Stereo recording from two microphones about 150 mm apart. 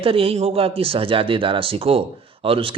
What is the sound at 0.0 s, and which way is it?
Speech, 40° right (ahead or behind).